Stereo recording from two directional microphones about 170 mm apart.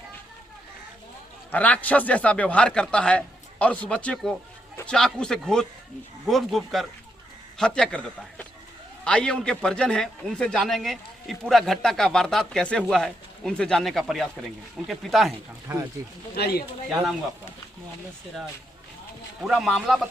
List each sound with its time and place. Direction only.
1.5 s a man's voice: 10° left (ahead or behind); by 15.8 s 10° right (ahead or behind)
16.3 s speech: 65° left (ahead or behind)
19.5 s a man's voice: centre (ahead or behind)